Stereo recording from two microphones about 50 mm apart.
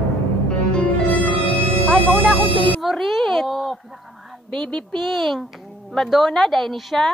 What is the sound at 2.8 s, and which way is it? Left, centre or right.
Speech, centre.